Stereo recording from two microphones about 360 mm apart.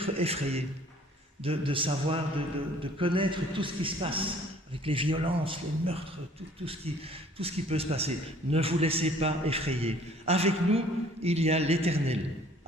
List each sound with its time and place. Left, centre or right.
0.0 s a man's voice: centre